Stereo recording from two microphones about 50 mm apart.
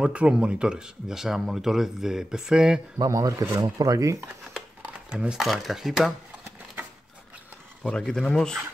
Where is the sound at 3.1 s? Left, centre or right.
Right.